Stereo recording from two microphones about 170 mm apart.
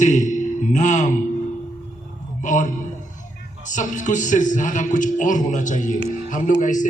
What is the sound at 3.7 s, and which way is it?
A man's voice, 45° left (ahead or behind).